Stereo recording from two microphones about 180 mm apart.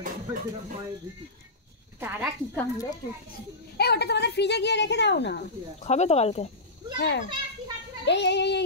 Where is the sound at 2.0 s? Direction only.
10° right (ahead or behind).